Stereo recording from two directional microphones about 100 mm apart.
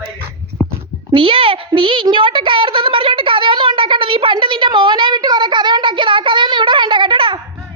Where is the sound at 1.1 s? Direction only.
65° right (ahead or behind).